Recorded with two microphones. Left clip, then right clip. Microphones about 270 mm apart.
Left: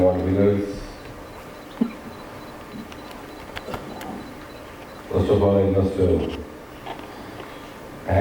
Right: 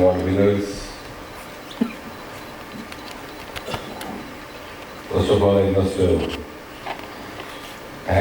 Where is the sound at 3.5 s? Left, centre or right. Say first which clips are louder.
Right 3 dB; centre.